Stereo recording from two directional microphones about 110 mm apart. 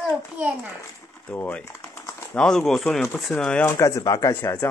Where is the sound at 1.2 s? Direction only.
15° left (ahead or behind).